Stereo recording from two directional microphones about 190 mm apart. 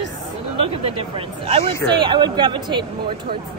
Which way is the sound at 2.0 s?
25° right (ahead or behind).